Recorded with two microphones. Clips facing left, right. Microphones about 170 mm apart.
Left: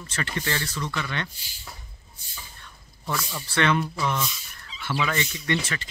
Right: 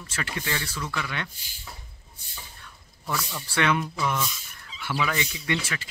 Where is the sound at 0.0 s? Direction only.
10° right (ahead or behind).